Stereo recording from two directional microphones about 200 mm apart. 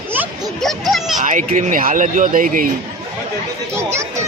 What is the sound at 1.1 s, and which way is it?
A child's voice, 40° right (ahead or behind).